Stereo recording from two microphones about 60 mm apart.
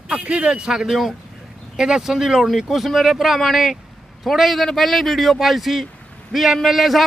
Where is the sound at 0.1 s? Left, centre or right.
Centre.